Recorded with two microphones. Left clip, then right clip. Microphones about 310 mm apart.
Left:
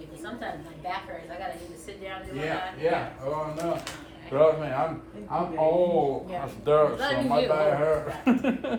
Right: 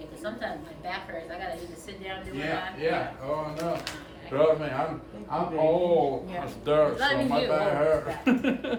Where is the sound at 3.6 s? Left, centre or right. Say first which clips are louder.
Left 1 dB; centre.